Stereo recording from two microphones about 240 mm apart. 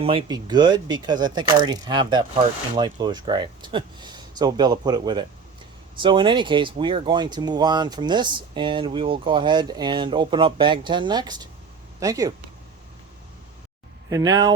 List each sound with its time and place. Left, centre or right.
0.0 s speech: right
14.1 s speech: centre